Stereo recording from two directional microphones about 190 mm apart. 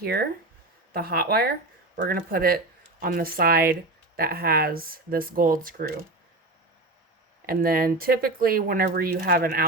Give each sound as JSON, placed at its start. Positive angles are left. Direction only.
{"t": 0.0, "sound": "speech", "side_deg": -55}
{"t": 7.4, "sound": "speech", "side_deg": -50}